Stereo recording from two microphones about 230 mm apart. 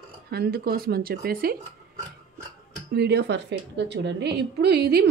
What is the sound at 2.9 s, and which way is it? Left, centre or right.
A woman's voice, right.